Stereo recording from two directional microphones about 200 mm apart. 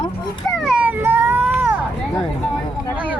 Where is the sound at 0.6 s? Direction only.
5° right (ahead or behind).